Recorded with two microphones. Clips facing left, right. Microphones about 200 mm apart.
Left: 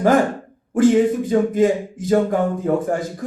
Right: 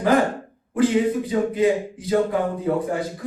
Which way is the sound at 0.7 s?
45° left (ahead or behind).